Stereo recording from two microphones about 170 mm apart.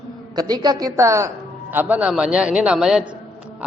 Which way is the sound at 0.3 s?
25° right (ahead or behind).